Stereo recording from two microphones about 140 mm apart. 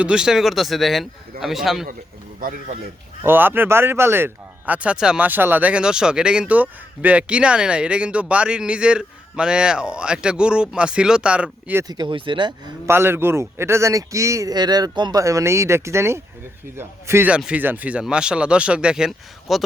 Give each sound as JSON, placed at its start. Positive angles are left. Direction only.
{"t": 0.0, "sound": "speech", "side_deg": -5}
{"t": 3.2, "sound": "speech", "side_deg": -15}
{"t": 11.8, "sound": "speech", "side_deg": -30}
{"t": 12.9, "sound": "a man's voice", "side_deg": -15}